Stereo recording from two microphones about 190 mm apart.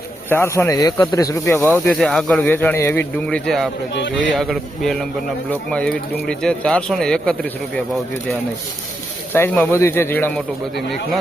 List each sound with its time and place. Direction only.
0.3 s speech: 15° left (ahead or behind)
1.7 s speech: centre (ahead or behind)
9.3 s speech: 10° left (ahead or behind)